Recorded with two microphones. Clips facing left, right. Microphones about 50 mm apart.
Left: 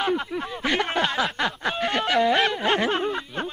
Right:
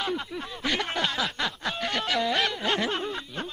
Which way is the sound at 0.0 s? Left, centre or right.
Left.